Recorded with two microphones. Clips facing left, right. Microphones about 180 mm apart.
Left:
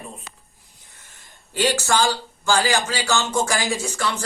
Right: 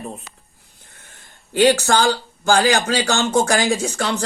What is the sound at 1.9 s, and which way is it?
A man's voice, 60° right (ahead or behind).